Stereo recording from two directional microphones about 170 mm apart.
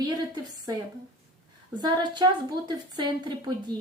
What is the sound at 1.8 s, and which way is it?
Speech, 25° right (ahead or behind).